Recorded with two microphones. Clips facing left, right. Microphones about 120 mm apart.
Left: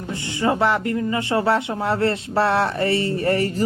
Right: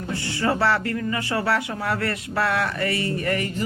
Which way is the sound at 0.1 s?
20° left (ahead or behind).